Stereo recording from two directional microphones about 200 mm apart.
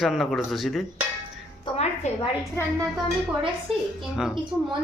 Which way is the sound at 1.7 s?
30° left (ahead or behind).